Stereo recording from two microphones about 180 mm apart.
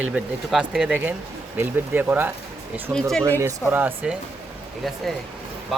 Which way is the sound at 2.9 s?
5° left (ahead or behind).